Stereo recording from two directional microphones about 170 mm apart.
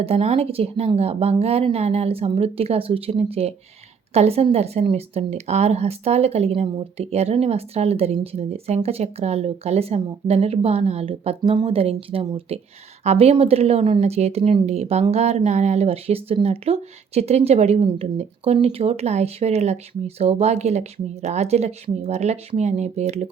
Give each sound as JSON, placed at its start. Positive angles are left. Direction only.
{"t": 0.0, "sound": "a woman's voice", "side_deg": -35}